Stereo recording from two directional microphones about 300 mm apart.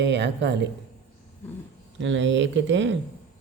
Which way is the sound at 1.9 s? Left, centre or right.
Right.